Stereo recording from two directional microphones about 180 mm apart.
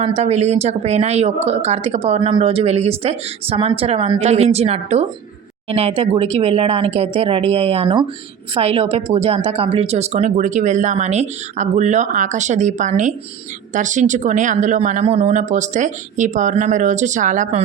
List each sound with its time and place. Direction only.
0.0 s speech: 35° right (ahead or behind)